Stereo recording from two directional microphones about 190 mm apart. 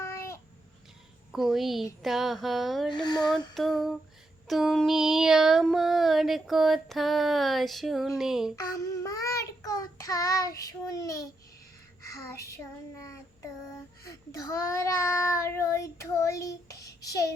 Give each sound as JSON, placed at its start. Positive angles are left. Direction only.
{"t": 0.0, "sound": "babbling", "side_deg": 15}
{"t": 1.3, "sound": "child singing", "side_deg": 0}
{"t": 2.9, "sound": "a sound", "side_deg": 20}
{"t": 3.5, "sound": "child singing", "side_deg": 0}
{"t": 8.9, "sound": "child singing", "side_deg": 15}
{"t": 12.5, "sound": "child singing", "side_deg": 15}